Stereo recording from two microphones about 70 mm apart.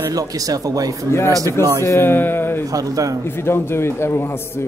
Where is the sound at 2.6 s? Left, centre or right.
Right.